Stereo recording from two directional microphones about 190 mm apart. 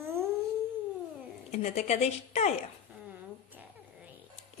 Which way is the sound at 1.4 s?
35° left (ahead or behind).